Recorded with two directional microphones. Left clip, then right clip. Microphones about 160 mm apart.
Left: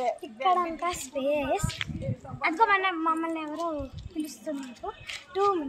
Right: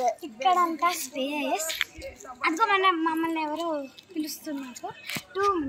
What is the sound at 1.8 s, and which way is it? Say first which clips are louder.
Speech: right 5 dB; 90° right.